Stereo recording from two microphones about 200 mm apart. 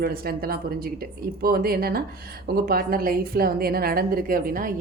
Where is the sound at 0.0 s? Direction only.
50° right (ahead or behind).